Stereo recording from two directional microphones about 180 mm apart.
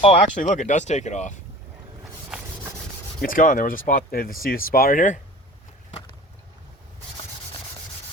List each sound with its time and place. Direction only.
0.0 s speech: 40° left (ahead or behind)
3.2 s speech: 50° left (ahead or behind)